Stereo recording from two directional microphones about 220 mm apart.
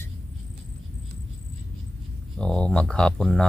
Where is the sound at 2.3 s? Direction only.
5° left (ahead or behind).